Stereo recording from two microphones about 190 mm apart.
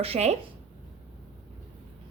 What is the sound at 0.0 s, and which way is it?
Speech, 35° right (ahead or behind).